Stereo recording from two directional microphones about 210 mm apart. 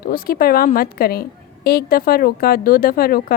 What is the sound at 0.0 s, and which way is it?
Speech, 45° left (ahead or behind).